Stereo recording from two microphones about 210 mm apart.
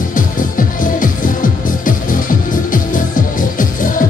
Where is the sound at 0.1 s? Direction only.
40° left (ahead or behind).